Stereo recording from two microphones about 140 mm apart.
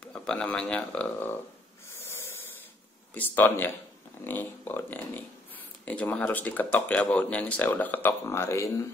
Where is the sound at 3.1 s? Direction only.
15° left (ahead or behind).